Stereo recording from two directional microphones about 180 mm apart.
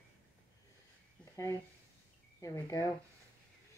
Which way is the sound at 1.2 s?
15° left (ahead or behind).